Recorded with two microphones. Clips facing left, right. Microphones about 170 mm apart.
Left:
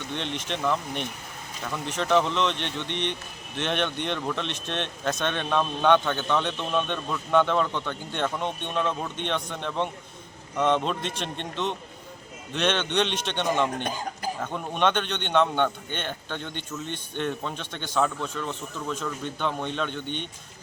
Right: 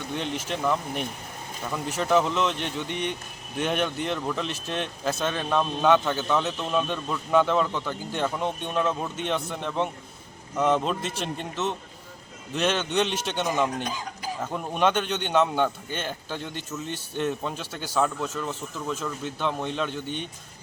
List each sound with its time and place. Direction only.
0.3 s speech: 5° right (ahead or behind)